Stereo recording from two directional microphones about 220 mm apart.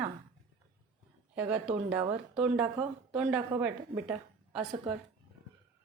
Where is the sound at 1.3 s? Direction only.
5° right (ahead or behind).